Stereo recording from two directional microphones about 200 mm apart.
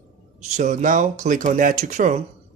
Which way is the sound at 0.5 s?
35° right (ahead or behind).